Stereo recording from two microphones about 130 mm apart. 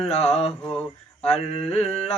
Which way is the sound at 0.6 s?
5° left (ahead or behind).